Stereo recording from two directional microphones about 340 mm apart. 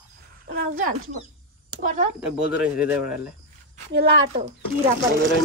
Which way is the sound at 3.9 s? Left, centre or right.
Right.